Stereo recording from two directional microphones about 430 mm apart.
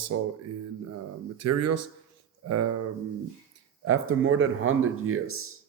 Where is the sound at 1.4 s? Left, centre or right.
Right.